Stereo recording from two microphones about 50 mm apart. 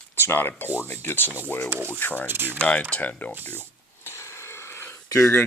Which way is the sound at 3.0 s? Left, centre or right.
Left.